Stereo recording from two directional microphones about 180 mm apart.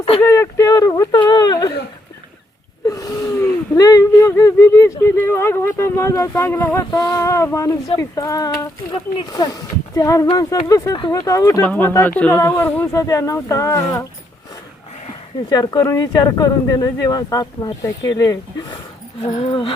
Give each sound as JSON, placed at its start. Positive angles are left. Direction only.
{"t": 0.2, "sound": "speech", "side_deg": 15}
{"t": 2.8, "sound": "a sound", "side_deg": 20}
{"t": 3.8, "sound": "speech", "side_deg": 20}
{"t": 15.4, "sound": "speech", "side_deg": 20}
{"t": 19.2, "sound": "speech", "side_deg": 35}